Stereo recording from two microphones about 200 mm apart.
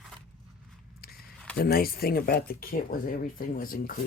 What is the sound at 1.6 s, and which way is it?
Speech, 50° left (ahead or behind).